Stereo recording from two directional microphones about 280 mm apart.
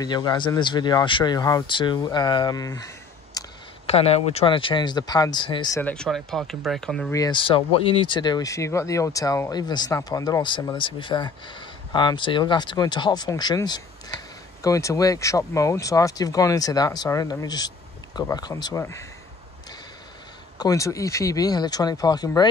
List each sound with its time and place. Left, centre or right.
0.0 s speech: centre
7.2 s speech: centre
20.5 s speech: centre